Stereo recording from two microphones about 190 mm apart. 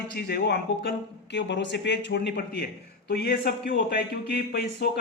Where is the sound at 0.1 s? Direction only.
60° left (ahead or behind).